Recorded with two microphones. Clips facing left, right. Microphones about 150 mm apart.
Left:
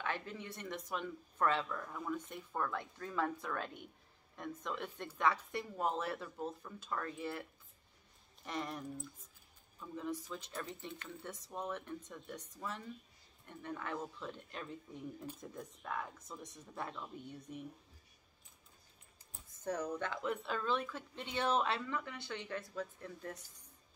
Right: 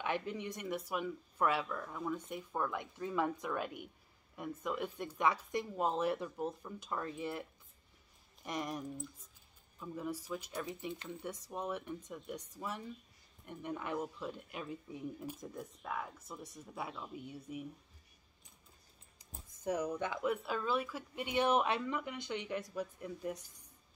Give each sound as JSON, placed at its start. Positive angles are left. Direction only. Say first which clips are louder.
{"t": 0.0, "sound": "speech", "louder": "right 4 dB", "side_deg": -15}
{"t": 8.5, "sound": "speech", "louder": "right 2 dB", "side_deg": -15}
{"t": 19.1, "sound": "speech", "louder": "right 6 dB", "side_deg": -10}